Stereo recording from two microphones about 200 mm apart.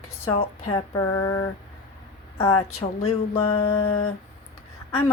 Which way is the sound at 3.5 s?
90° left.